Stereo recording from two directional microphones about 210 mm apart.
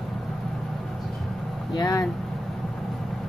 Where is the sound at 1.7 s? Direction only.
15° left (ahead or behind).